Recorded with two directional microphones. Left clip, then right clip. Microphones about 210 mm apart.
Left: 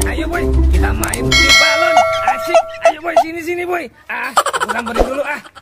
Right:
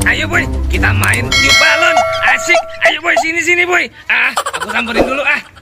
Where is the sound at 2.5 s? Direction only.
25° left (ahead or behind).